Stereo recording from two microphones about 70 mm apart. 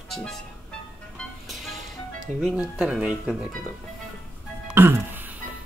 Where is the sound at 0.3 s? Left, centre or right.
Centre.